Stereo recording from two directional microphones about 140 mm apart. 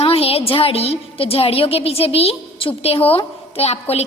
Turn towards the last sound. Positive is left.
turn(degrees=50)  # may be behind; listen again after turning